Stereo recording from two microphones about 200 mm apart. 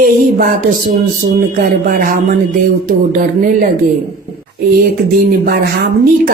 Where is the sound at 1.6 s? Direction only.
45° right (ahead or behind).